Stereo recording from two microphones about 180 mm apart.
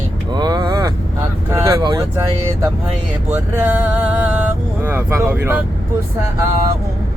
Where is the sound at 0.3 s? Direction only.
20° right (ahead or behind).